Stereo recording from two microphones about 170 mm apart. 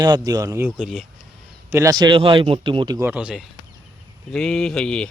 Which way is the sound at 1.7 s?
15° right (ahead or behind).